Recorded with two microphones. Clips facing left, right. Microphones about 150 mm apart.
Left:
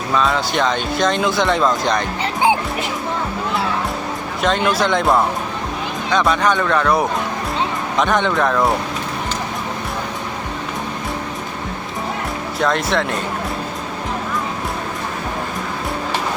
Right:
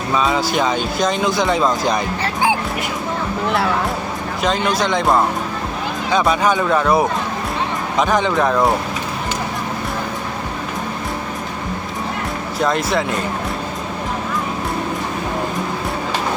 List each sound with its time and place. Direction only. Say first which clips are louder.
0.1 s speech: right 1 dB; 5° right (ahead or behind)
2.2 s music: left 3 dB; 20° left (ahead or behind)
4.4 s speech: left 1 dB; centre (ahead or behind)
12.5 s speech: even; centre (ahead or behind)